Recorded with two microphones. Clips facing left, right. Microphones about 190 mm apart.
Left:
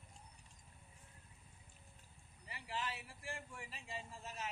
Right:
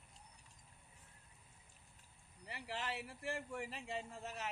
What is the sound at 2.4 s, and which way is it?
Speech, 65° right (ahead or behind).